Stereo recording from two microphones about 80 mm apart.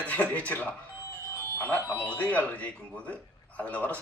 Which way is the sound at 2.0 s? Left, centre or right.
Centre.